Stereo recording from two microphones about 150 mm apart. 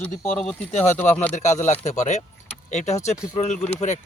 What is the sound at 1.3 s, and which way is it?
Speech, 50° left (ahead or behind).